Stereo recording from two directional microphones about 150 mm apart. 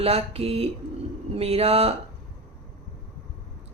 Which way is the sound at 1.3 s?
40° right (ahead or behind).